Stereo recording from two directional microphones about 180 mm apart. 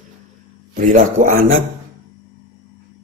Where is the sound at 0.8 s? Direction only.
45° right (ahead or behind).